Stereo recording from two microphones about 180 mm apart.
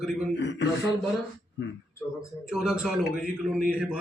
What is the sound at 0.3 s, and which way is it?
Speech, 85° left.